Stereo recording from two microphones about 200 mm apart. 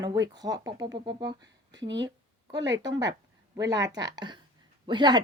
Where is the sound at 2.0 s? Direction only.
20° right (ahead or behind).